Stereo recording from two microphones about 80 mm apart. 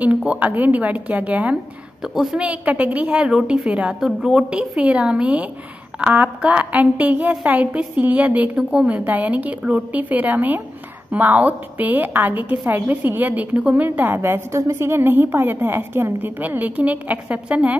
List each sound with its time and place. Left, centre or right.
0.0 s a woman's voice: centre